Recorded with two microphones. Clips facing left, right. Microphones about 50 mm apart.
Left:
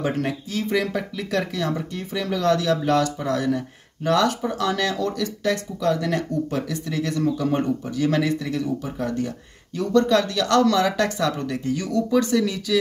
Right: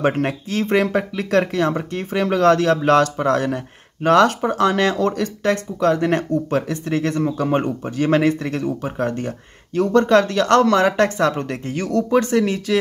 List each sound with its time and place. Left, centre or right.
0.0 s speech: right